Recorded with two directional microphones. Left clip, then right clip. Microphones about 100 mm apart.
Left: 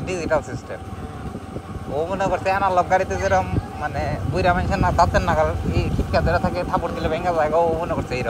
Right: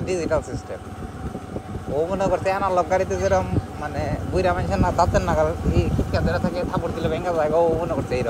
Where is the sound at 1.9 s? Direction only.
45° right (ahead or behind).